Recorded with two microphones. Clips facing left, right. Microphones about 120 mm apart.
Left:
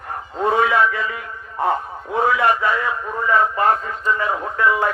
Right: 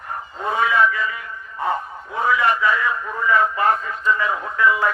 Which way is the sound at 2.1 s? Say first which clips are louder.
Left 2 dB; 55° left (ahead or behind).